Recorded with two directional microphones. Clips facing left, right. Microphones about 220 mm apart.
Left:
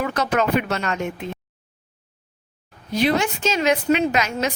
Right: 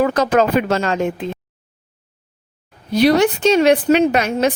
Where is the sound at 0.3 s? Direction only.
30° right (ahead or behind).